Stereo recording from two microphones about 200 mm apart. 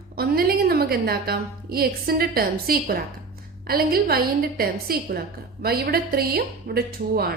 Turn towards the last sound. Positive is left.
turn(degrees=-50)  # may be behind; listen again after turning